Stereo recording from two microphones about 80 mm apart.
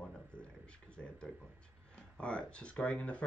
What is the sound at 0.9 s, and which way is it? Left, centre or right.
Speech, centre.